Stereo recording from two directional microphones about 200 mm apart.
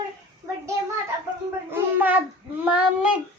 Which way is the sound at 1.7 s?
10° right (ahead or behind).